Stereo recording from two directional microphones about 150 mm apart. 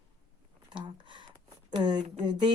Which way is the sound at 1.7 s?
30° right (ahead or behind).